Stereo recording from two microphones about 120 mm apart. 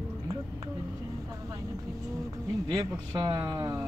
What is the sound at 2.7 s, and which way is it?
Speech, 40° right (ahead or behind).